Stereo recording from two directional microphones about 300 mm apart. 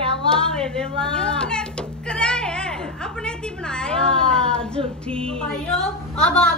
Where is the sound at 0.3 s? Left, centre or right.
Centre.